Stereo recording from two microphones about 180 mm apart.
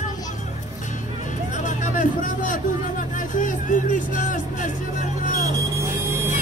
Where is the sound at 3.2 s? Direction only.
45° left (ahead or behind).